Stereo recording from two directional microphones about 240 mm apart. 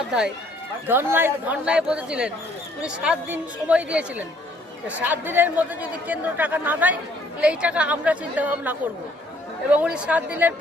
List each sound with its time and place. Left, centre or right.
0.9 s speech: centre